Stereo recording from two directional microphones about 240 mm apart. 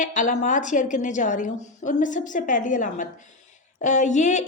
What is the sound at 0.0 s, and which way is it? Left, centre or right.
A woman's voice, left.